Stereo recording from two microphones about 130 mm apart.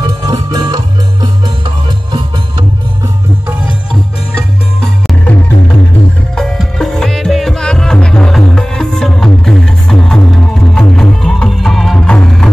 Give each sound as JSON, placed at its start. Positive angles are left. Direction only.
{"t": 0.0, "sound": "music", "side_deg": -30}
{"t": 4.7, "sound": "music", "side_deg": 10}